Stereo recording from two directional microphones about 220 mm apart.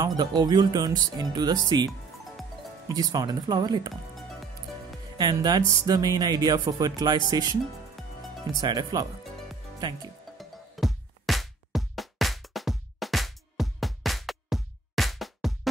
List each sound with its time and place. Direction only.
0.0 s speech: 20° right (ahead or behind)
1.0 s music: 20° right (ahead or behind)
2.9 s music: 15° right (ahead or behind)
5.1 s speech: 20° right (ahead or behind)
5.7 s music: 15° right (ahead or behind)
8.0 s music: centre (ahead or behind)
8.5 s speech: 20° right (ahead or behind)
10.3 s music: centre (ahead or behind)